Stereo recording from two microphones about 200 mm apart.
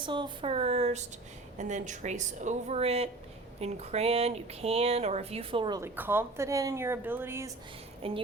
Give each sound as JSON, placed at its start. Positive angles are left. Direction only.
{"t": 0.0, "sound": "speech", "side_deg": -25}
{"t": 8.0, "sound": "speech", "side_deg": -30}